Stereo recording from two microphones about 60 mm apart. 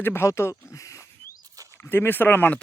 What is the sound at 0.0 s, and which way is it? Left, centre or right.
Speech, left.